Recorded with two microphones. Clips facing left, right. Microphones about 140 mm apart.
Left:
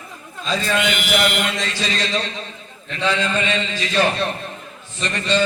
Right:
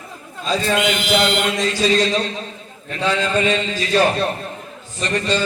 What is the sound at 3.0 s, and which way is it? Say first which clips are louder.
A man's voice: right 2 dB; 40° right (ahead or behind).